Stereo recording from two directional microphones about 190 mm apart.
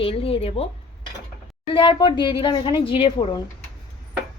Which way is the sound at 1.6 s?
25° left (ahead or behind).